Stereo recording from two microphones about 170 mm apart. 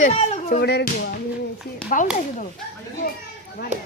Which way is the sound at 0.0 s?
40° left (ahead or behind).